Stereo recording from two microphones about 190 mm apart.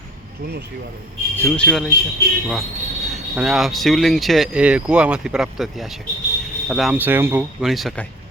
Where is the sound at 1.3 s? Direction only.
10° left (ahead or behind).